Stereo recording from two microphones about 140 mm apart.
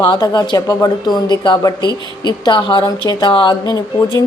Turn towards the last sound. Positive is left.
turn(degrees=30)  # may be behind; listen again after turning